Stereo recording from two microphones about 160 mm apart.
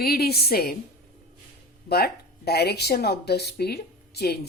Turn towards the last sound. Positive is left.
turn(degrees=85)